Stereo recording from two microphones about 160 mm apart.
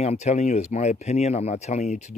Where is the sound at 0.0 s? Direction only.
45° left (ahead or behind).